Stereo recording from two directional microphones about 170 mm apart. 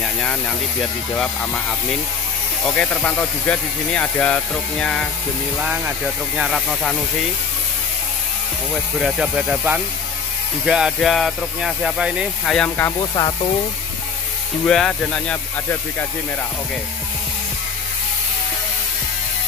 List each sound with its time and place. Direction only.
2.6 s speech: 10° left (ahead or behind)
5.6 s speech: 5° right (ahead or behind)
9.0 s speech: 5° right (ahead or behind)
14.7 s speech: 5° left (ahead or behind)